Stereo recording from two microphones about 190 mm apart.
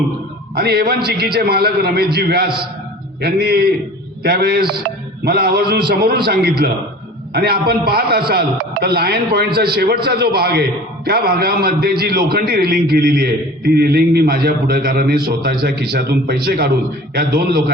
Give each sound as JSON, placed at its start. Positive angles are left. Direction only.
{"t": 0.5, "sound": "a man's voice", "side_deg": -55}